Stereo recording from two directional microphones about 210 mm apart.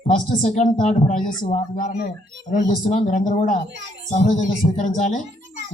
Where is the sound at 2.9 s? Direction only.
35° left (ahead or behind).